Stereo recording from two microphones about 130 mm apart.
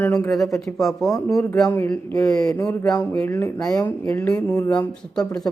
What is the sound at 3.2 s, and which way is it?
Speech, 20° left (ahead or behind).